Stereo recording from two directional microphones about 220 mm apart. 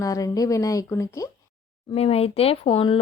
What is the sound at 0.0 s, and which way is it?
Speech, 15° left (ahead or behind).